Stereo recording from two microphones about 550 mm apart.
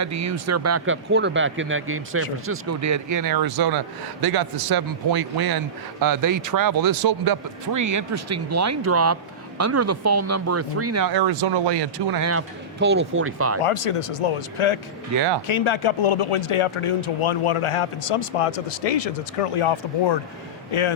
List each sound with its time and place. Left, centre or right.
0.0 s speech: right
11.1 s speech: right
12.2 s speech: right
13.6 s speech: left
15.1 s speech: right
15.4 s speech: left